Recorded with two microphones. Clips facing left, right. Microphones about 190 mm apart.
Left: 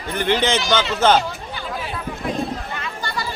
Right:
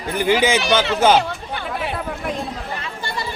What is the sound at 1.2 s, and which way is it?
Chatter, 65° right (ahead or behind).